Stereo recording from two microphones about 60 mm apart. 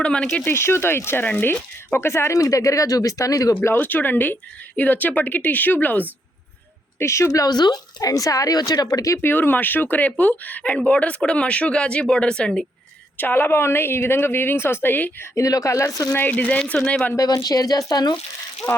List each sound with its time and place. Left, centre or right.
0.0 s speech: centre
0.4 s a woman's voice: left
1.9 s speech: left
2.4 s speech: left
3.8 s a woman's voice: left
7.0 s speech: left
7.4 s speech: left
9.2 s a woman's voice: left; by 12.6 s centre
13.1 s a woman's voice: left
15.4 s speech: left
16.3 s speech: left
17.2 s speech: left
18.6 s a woman's voice: left